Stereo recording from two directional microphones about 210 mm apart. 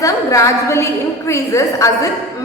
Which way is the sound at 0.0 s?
15° left (ahead or behind).